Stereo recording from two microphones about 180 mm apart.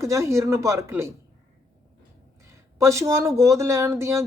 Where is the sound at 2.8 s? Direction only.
15° right (ahead or behind).